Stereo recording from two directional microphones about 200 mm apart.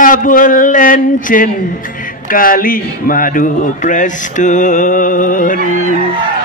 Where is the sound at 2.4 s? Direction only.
45° left (ahead or behind).